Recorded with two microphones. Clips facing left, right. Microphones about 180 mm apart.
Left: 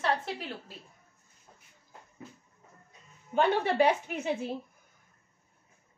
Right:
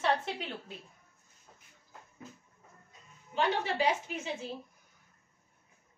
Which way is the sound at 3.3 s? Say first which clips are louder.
Left 5 dB; 55° left (ahead or behind).